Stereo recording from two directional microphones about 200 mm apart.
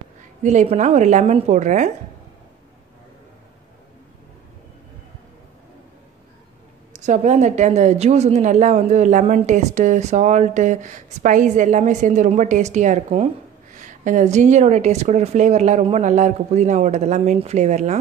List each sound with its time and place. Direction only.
0.4 s speech: 35° right (ahead or behind)
6.9 s speech: 35° right (ahead or behind)